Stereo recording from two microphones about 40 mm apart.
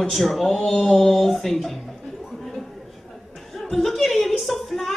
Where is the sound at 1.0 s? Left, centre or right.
Centre.